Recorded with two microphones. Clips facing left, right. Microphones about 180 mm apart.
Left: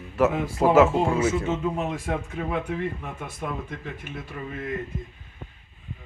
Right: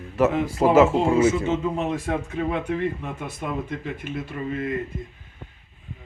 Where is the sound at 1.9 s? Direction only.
Centre (ahead or behind).